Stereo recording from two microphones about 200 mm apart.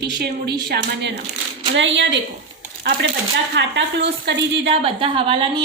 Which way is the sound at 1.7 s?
65° right (ahead or behind).